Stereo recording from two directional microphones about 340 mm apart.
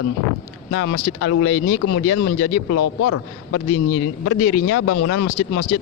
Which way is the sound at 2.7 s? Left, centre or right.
Left.